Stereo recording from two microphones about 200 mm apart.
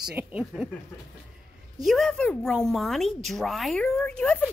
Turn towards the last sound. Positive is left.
turn(degrees=5)  # may be behind; listen again after turning